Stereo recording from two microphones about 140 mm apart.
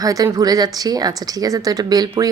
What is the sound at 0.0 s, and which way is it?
Speech, 25° right (ahead or behind).